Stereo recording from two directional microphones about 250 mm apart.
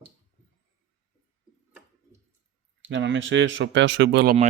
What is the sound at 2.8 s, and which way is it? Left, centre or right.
Speech, right.